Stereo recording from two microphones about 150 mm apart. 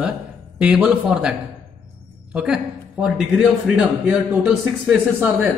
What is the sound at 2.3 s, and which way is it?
A man's voice, 5° right (ahead or behind).